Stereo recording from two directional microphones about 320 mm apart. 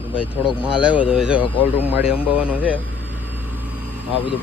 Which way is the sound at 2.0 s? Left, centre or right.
Centre.